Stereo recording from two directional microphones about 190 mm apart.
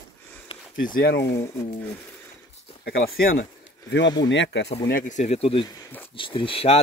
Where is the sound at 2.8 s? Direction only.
55° left (ahead or behind).